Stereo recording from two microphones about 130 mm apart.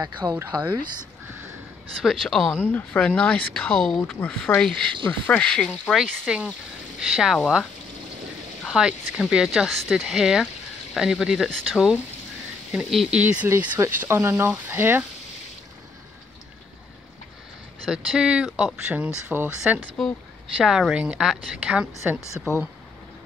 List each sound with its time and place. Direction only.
0.3 s speech: 20° right (ahead or behind)
2.0 s speech: centre (ahead or behind)
8.6 s speech: 5° right (ahead or behind)
17.8 s speech: 5° right (ahead or behind)